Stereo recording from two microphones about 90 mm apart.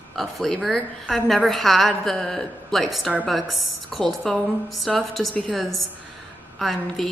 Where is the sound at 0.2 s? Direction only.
5° left (ahead or behind).